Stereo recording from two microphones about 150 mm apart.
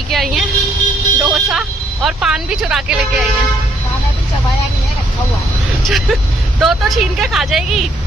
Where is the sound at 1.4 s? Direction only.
5° right (ahead or behind).